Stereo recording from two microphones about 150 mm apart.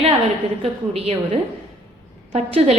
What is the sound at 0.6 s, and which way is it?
A woman's voice, 40° right (ahead or behind).